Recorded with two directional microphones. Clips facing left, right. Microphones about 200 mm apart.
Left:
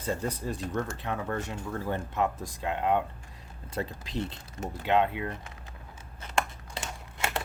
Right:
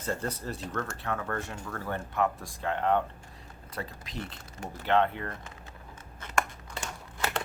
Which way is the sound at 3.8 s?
25° left (ahead or behind).